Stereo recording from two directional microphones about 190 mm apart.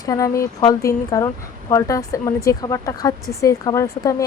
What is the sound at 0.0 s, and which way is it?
A woman's voice, 20° left (ahead or behind).